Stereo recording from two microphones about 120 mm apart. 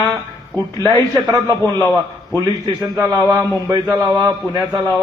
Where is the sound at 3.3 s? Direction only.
30° right (ahead or behind).